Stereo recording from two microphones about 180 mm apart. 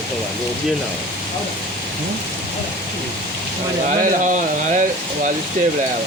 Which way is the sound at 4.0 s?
45° right (ahead or behind).